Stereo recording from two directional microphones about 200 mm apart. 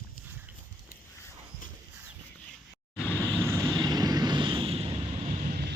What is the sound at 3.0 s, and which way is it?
Vehicle, 10° left (ahead or behind).